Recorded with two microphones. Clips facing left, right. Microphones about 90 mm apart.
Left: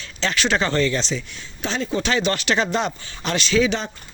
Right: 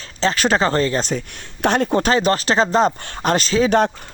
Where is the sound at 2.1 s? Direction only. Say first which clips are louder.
Right 1 dB; 35° right (ahead or behind).